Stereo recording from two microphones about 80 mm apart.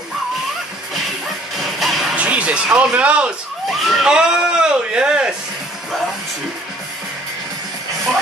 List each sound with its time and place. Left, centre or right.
1.8 s music: centre
2.1 s speech: centre
3.8 s speech: centre
4.1 s speech: centre